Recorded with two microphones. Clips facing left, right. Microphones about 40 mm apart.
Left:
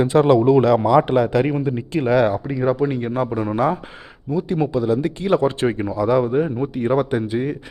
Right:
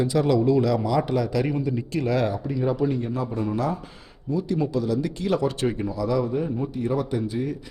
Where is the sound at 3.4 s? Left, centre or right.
Left.